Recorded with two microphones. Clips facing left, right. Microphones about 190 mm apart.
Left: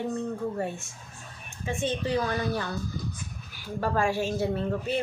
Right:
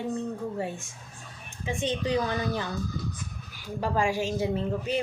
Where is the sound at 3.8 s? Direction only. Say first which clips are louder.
Even; 15° right (ahead or behind).